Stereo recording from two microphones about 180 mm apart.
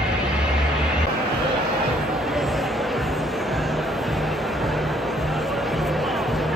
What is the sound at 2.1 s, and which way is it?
Music, centre (ahead or behind).